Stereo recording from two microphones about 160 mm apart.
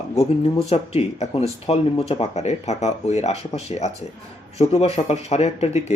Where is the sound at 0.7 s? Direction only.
40° left (ahead or behind).